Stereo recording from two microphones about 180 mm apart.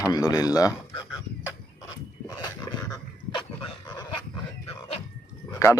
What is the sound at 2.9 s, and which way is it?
Dog, 25° left (ahead or behind).